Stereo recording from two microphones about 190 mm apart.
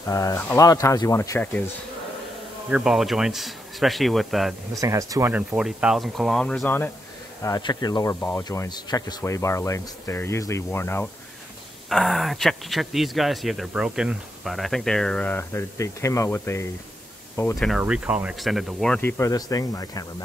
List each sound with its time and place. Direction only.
0.1 s speech: 15° left (ahead or behind)
2.7 s speech: centre (ahead or behind)
4.7 s speech: 15° right (ahead or behind); by 6.9 s 5° left (ahead or behind)
7.4 s speech: 20° left (ahead or behind)
11.9 s speech: centre (ahead or behind)
17.6 s speech: centre (ahead or behind)
18.9 s speech: 10° left (ahead or behind)